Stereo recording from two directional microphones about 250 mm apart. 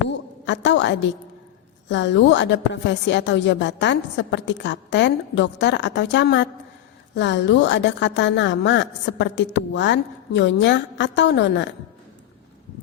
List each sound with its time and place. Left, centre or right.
0.1 s a woman's voice: left